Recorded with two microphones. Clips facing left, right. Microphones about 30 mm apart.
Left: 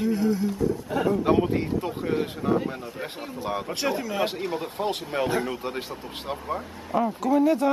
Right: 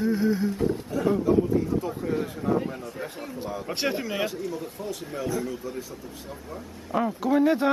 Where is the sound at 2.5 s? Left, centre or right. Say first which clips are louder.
Left 1 dB; left.